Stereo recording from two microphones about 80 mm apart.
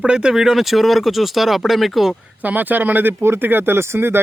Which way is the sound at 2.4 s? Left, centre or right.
Right.